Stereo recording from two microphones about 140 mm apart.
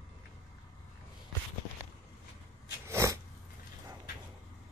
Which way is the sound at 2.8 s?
20° right (ahead or behind).